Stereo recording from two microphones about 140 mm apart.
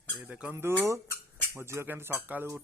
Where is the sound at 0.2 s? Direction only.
10° right (ahead or behind).